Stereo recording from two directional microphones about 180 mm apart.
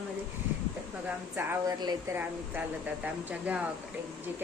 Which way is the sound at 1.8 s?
25° right (ahead or behind).